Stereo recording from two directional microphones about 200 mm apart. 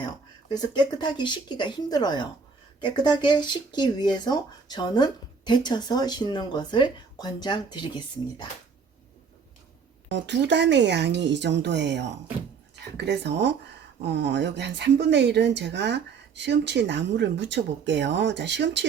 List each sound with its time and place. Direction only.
0.0 s speech: 20° left (ahead or behind)
10.1 s speech: 60° right (ahead or behind)